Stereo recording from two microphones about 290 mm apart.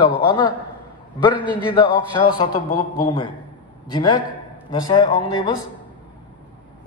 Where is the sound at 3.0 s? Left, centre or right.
Centre.